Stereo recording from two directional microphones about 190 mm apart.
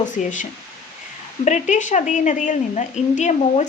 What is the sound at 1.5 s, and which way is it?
Speech, 40° left (ahead or behind).